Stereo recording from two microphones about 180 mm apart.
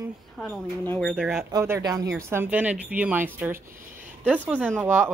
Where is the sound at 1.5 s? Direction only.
15° right (ahead or behind).